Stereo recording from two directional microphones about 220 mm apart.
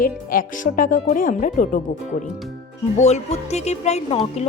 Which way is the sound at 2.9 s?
30° left (ahead or behind).